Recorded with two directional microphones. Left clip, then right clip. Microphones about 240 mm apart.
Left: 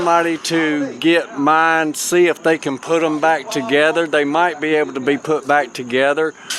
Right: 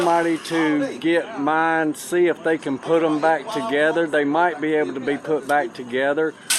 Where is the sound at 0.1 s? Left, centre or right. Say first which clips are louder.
Left 4 dB; left.